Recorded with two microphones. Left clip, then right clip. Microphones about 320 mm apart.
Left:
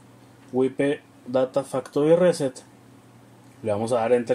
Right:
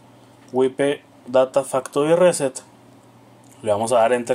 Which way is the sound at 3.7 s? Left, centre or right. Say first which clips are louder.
Right 5 dB; right.